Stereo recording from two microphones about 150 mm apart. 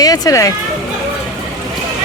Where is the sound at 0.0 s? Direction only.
25° left (ahead or behind).